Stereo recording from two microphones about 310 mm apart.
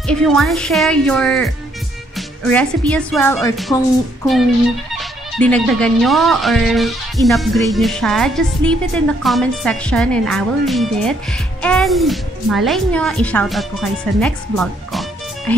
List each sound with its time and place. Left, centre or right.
0.0 s speech: centre
4.9 s speech: centre